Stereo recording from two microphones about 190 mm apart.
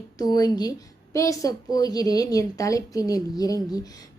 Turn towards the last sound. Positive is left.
turn(degrees=20)  # may be behind; listen again after turning